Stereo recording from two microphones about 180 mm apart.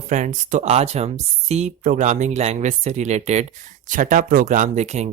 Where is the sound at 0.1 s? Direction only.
45° right (ahead or behind).